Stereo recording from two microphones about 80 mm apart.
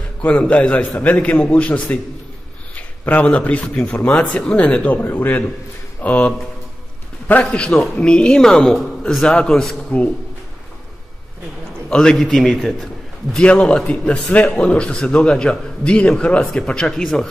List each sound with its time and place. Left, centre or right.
0.2 s a man's voice: centre
11.9 s a man's voice: centre
13.4 s a man's voice: centre